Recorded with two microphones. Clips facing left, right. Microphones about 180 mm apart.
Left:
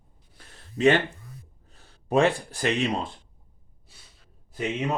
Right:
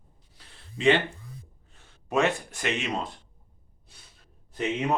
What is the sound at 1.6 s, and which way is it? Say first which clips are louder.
Speech: left 7 dB; 35° left (ahead or behind).